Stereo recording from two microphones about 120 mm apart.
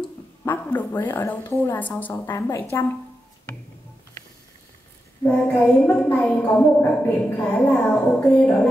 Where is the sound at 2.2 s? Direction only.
25° left (ahead or behind).